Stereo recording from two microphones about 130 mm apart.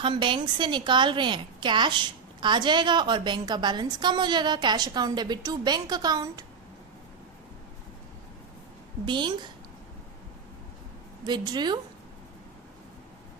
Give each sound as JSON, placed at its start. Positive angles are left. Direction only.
{"t": 0.0, "sound": "a woman's voice", "side_deg": -40}
{"t": 9.0, "sound": "a woman's voice", "side_deg": -35}
{"t": 11.3, "sound": "a woman's voice", "side_deg": -35}